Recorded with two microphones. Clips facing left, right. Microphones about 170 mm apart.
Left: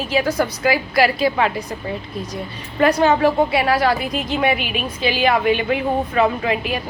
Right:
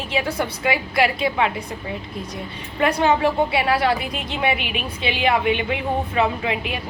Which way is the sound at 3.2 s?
25° right (ahead or behind).